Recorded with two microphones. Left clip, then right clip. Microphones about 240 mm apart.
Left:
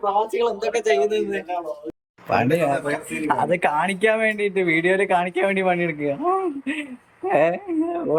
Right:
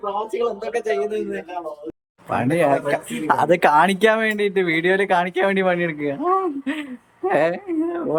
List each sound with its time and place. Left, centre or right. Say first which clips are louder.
0.3 s speech: left 1 dB; centre
2.3 s speech: right 1 dB; centre
7.3 s a sound: even; centre